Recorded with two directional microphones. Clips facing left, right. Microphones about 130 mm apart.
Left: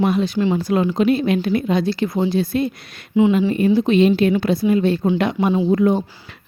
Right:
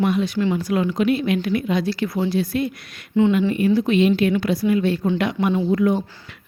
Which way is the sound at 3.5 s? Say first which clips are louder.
Left 2 dB; 30° left (ahead or behind).